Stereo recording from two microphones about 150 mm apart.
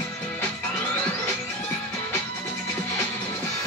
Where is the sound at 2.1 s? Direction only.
10° left (ahead or behind).